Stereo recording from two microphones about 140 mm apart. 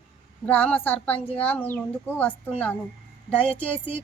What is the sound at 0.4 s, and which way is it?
A woman's voice, 10° left (ahead or behind).